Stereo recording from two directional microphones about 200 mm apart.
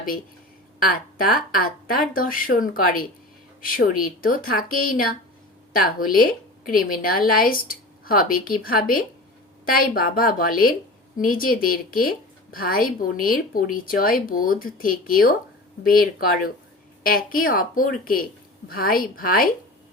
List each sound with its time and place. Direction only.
0.8 s speech: 45° left (ahead or behind)